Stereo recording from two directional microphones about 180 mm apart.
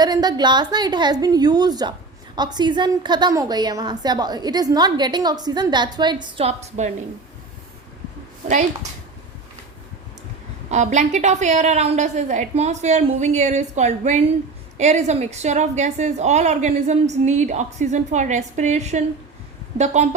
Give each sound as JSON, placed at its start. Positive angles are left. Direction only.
{"t": 0.0, "sound": "a woman's voice", "side_deg": -20}
{"t": 10.7, "sound": "a woman's voice", "side_deg": -40}